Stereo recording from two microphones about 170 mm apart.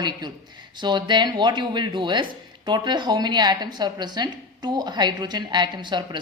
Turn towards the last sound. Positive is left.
turn(degrees=-25)  # may be behind; listen again after turning